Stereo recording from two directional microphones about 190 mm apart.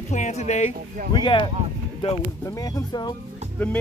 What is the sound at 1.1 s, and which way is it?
Speech, 25° left (ahead or behind).